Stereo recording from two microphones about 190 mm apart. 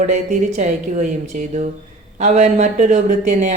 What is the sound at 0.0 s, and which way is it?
Speech, 40° right (ahead or behind).